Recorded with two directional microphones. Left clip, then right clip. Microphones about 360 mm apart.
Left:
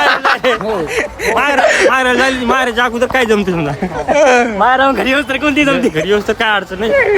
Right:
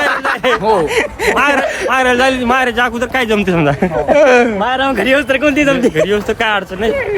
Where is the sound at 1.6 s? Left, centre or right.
Left.